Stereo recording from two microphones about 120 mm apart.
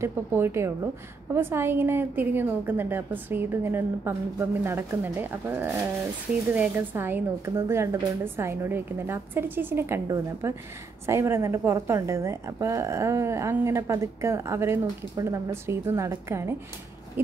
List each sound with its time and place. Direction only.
0.0 s a woman's voice: 20° right (ahead or behind)